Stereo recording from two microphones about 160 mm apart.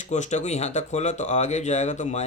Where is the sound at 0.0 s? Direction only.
45° left (ahead or behind).